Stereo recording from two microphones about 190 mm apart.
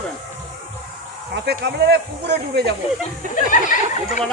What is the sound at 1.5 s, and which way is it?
Speech, 60° right (ahead or behind).